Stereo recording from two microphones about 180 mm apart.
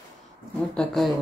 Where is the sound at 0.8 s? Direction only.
Centre (ahead or behind).